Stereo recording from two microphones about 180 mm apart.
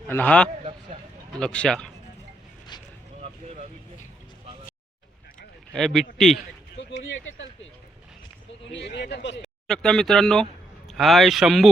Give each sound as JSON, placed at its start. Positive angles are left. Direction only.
{"t": 0.1, "sound": "a man's voice", "side_deg": 10}
{"t": 5.7, "sound": "speech", "side_deg": 0}
{"t": 6.7, "sound": "a sound", "side_deg": 90}
{"t": 8.7, "sound": "speech", "side_deg": 75}
{"t": 9.6, "sound": "speech", "side_deg": 5}